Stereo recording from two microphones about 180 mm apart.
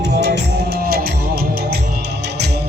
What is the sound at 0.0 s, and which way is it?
Music, 70° right (ahead or behind).